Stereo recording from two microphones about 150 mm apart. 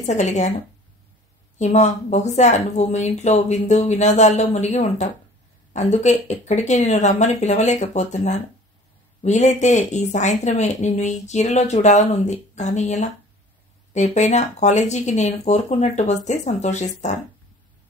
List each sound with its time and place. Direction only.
0.0 s speech: 50° left (ahead or behind)
1.6 s speech: 50° left (ahead or behind)